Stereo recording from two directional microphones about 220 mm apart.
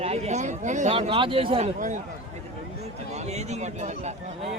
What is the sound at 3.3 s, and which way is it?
Speech, 30° right (ahead or behind).